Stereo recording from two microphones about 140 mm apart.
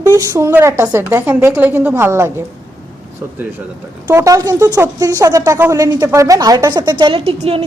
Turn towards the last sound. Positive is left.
turn(degrees=-45)  # may be behind; listen again after turning